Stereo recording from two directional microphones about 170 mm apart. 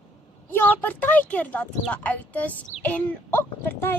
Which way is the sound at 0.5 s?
10° left (ahead or behind).